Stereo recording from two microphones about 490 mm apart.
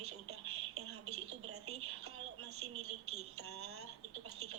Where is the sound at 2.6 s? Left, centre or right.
Right.